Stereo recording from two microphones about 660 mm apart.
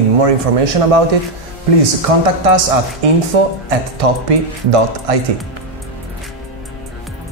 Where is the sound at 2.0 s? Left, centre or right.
Right.